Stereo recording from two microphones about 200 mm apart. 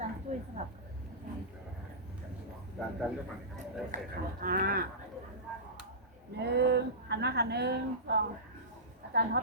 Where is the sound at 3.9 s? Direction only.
45° right (ahead or behind).